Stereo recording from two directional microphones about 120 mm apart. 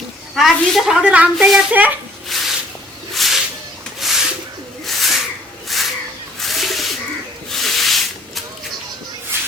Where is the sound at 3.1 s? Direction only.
Centre (ahead or behind).